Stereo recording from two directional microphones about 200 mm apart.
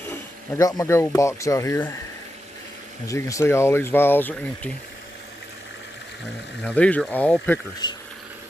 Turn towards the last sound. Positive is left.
turn(degrees=20)  # may be behind; listen again after turning